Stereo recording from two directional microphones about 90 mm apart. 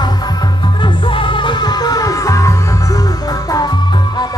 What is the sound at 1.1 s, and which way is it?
Music, 65° left (ahead or behind).